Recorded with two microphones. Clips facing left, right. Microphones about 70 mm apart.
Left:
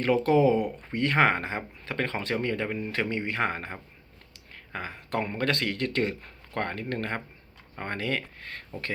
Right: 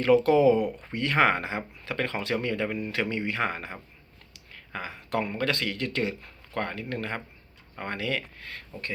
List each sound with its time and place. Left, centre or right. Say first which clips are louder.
0.0 s speech: right 2 dB; left
0.6 s speech: right 2 dB; centre
0.9 s speech: even; left